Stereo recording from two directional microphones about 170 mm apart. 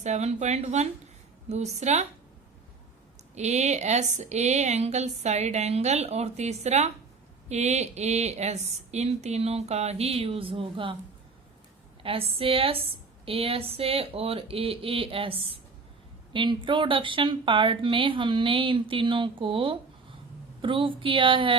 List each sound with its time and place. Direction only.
0.0 s a woman's voice: 40° right (ahead or behind)
3.3 s a woman's voice: 40° right (ahead or behind)
12.0 s a woman's voice: 35° right (ahead or behind)